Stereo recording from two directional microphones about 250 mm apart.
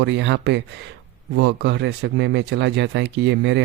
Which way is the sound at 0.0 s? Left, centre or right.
Right.